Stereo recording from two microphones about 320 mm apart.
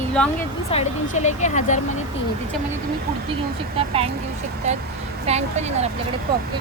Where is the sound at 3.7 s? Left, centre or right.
Centre.